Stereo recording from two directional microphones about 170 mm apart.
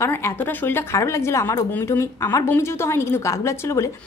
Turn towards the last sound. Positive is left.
turn(degrees=15)  # may be behind; listen again after turning